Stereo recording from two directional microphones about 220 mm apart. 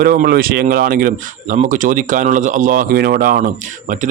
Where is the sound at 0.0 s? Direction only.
40° right (ahead or behind).